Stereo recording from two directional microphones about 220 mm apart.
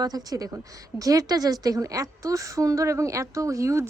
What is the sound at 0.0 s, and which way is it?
A woman's voice, 15° right (ahead or behind).